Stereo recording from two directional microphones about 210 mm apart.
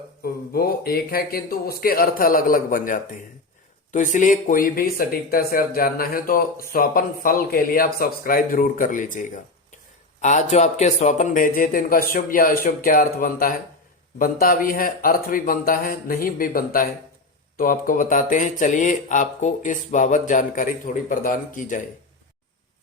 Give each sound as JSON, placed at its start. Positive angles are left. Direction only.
{"t": 0.2, "sound": "speech", "side_deg": 45}